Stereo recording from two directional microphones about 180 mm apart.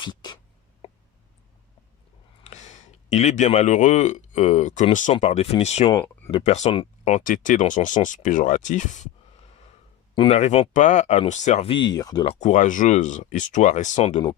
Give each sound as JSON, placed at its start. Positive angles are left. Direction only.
{"t": 0.0, "sound": "a sound", "side_deg": 25}
{"t": 2.4, "sound": "speech", "side_deg": 40}
{"t": 10.2, "sound": "speech", "side_deg": 35}
{"t": 11.7, "sound": "speech", "side_deg": 25}
{"t": 12.3, "sound": "speech", "side_deg": 40}